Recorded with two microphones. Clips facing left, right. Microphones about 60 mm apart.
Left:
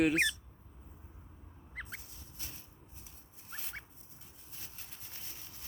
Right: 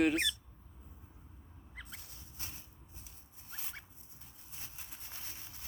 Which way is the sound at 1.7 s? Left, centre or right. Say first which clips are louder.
Left 6 dB; left.